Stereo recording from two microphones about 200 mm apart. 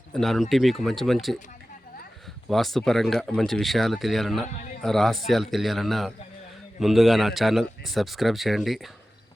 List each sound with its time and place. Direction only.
0.1 s a man's voice: centre (ahead or behind)
2.5 s a man's voice: centre (ahead or behind)